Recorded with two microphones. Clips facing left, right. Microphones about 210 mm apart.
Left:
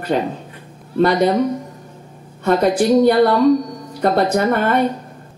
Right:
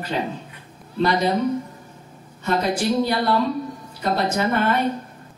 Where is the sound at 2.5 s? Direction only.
55° left (ahead or behind).